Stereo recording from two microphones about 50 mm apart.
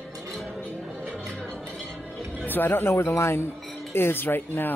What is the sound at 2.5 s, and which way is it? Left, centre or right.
Speech, left.